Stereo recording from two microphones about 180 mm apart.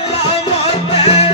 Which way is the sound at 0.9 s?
35° left (ahead or behind).